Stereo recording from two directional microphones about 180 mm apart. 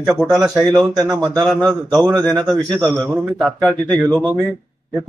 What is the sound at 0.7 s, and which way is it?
Speech, 20° right (ahead or behind).